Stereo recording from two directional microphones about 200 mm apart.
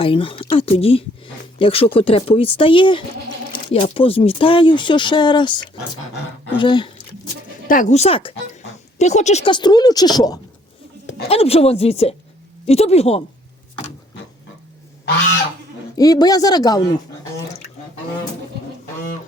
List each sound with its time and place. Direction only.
0.0 s speech: 25° left (ahead or behind)
7.7 s speech: 40° left (ahead or behind); by 10.4 s 20° left (ahead or behind)
11.3 s speech: 30° left (ahead or behind)
16.0 s speech: 20° left (ahead or behind)